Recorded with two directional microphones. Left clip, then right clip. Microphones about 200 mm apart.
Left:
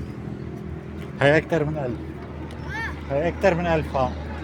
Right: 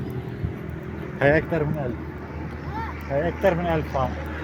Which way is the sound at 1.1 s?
10° left (ahead or behind).